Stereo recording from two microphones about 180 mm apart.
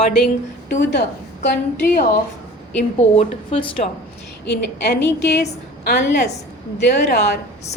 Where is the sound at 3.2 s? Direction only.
30° left (ahead or behind).